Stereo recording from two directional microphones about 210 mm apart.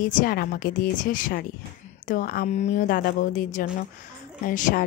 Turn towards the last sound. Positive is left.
turn(degrees=40)  # may be behind; listen again after turning